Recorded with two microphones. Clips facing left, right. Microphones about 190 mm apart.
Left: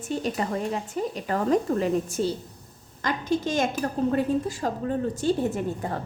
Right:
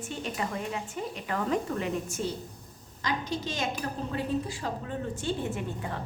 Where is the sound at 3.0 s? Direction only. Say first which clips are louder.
Left 6 dB; 50° left (ahead or behind).